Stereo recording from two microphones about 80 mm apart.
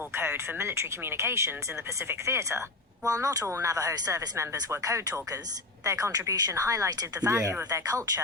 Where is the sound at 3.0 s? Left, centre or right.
Right.